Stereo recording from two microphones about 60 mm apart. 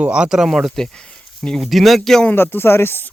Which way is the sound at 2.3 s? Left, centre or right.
Left.